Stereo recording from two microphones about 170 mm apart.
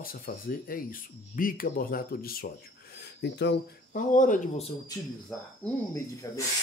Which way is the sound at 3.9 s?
50° left (ahead or behind).